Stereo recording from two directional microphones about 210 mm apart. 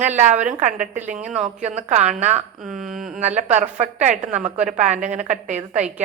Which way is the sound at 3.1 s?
35° right (ahead or behind).